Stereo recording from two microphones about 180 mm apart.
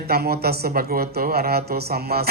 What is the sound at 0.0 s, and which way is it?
Speech, 60° right (ahead or behind).